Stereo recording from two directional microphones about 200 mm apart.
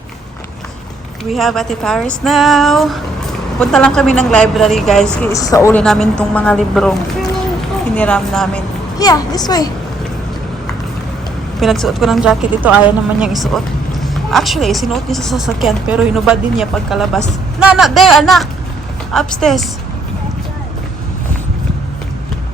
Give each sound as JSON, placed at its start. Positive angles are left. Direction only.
{"t": 1.2, "sound": "speech", "side_deg": 0}
{"t": 5.2, "sound": "speech", "side_deg": 15}
{"t": 5.8, "sound": "speech", "side_deg": 5}
{"t": 9.0, "sound": "a child's voice", "side_deg": 20}
{"t": 11.6, "sound": "speech", "side_deg": 0}